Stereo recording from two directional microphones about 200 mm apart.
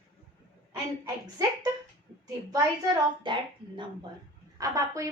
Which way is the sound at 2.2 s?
15° right (ahead or behind).